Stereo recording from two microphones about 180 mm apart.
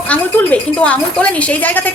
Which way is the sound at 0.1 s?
5° left (ahead or behind).